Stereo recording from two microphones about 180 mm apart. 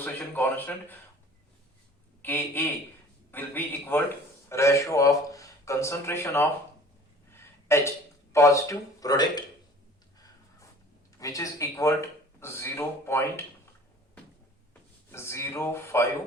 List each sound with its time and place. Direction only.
0.0 s a man's voice: 10° left (ahead or behind)
2.2 s a man's voice: 10° left (ahead or behind)
11.2 s a man's voice: 20° left (ahead or behind)
15.1 s a man's voice: 15° left (ahead or behind)